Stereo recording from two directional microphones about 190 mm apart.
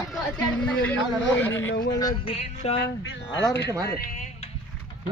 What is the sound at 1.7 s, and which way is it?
Speech, 65° left (ahead or behind).